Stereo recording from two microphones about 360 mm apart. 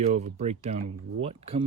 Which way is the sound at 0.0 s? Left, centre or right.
Centre.